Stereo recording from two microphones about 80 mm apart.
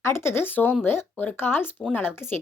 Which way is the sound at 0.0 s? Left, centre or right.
Left.